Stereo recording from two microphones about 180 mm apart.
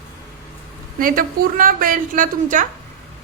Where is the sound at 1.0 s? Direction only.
50° right (ahead or behind).